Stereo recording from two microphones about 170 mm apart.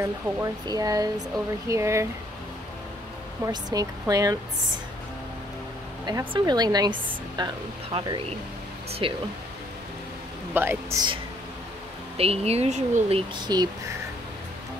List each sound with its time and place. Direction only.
0.0 s speech: 20° right (ahead or behind)
3.4 s speech: 20° right (ahead or behind)
6.0 s speech: 25° right (ahead or behind)
10.5 s speech: 15° right (ahead or behind)
12.2 s speech: 35° right (ahead or behind)
13.4 s speech: 25° right (ahead or behind)